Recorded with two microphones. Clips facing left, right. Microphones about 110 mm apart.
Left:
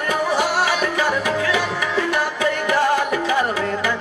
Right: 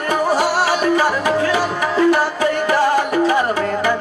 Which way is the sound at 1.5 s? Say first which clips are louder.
Right 3 dB; 40° right (ahead or behind).